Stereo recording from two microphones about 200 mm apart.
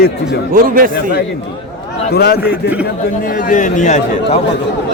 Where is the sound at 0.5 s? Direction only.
45° right (ahead or behind).